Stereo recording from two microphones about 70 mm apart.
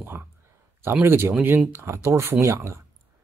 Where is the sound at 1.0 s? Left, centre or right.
Right.